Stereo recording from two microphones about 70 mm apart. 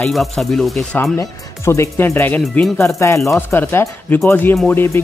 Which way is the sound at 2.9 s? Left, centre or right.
Left.